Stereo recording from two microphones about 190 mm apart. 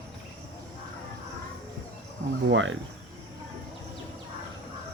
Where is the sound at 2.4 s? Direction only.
90° right.